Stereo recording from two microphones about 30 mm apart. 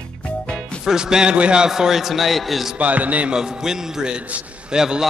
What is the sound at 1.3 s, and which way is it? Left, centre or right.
Speech, right.